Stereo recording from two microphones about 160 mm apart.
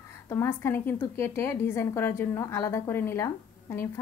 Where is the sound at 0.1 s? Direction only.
15° left (ahead or behind).